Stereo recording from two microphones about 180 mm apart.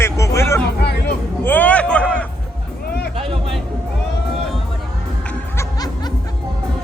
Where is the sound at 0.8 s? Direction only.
65° left (ahead or behind).